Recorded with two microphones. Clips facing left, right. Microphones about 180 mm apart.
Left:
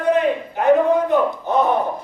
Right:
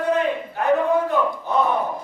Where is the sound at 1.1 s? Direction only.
20° left (ahead or behind).